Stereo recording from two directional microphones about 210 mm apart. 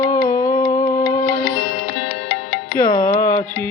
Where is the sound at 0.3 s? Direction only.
15° left (ahead or behind).